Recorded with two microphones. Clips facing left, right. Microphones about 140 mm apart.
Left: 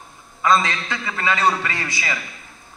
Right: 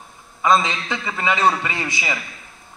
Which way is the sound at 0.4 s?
20° right (ahead or behind).